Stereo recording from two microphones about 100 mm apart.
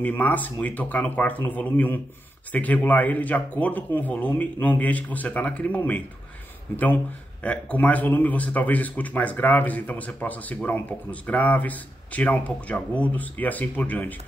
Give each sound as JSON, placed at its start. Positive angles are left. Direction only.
{"t": 0.0, "sound": "speech", "side_deg": 15}
{"t": 7.4, "sound": "speech", "side_deg": 15}